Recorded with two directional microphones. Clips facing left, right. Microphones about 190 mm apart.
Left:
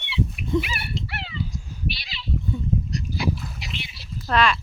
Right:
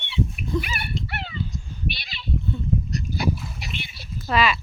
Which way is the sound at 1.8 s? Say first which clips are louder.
Even; 50° right (ahead or behind).